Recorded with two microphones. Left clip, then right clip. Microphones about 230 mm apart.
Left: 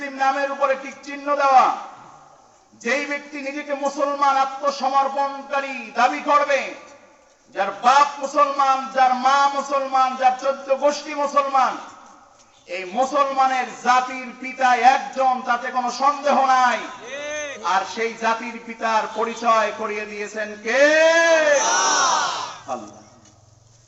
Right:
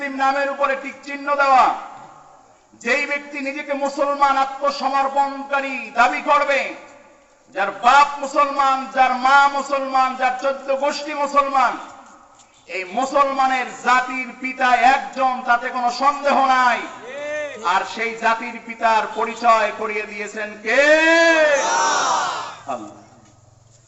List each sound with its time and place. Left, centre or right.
0.0 s speech: right
2.8 s speech: right
7.9 s speech: right
12.7 s speech: right
17.0 s a sound: left
17.6 s speech: right
21.8 s speech: centre